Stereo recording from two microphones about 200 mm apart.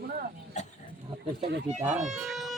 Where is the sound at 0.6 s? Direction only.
35° left (ahead or behind).